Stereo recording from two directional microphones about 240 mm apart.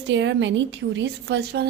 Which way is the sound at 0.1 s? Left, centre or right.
Right.